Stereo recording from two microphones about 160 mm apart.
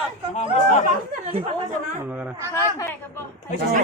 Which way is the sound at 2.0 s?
10° right (ahead or behind).